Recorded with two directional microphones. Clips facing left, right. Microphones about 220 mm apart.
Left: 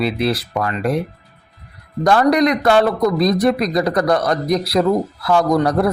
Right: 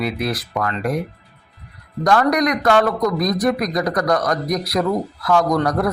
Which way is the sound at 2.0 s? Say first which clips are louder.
Left 3 dB; 30° left (ahead or behind).